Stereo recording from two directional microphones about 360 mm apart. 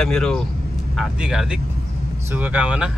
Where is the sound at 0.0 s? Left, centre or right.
Centre.